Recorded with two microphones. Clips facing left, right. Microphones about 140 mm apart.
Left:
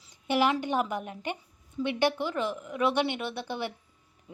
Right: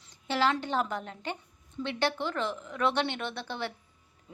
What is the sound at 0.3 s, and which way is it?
A woman's voice, 15° left (ahead or behind).